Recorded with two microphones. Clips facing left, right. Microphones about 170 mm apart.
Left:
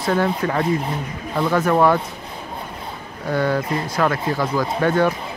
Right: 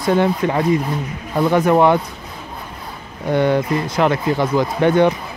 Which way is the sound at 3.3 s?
25° right (ahead or behind).